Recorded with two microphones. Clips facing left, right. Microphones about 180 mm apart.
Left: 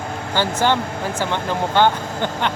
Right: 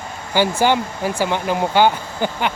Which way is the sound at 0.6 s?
10° right (ahead or behind).